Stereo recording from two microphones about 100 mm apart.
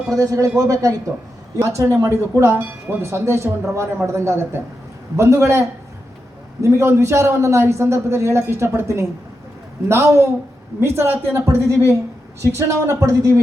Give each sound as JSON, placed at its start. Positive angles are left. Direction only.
{"t": 0.1, "sound": "speech", "side_deg": -35}